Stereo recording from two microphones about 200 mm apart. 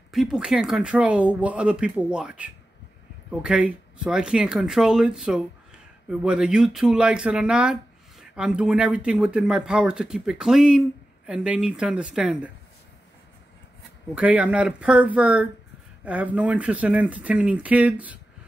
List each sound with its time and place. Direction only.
0.1 s speech: centre (ahead or behind)
14.1 s speech: 5° right (ahead or behind)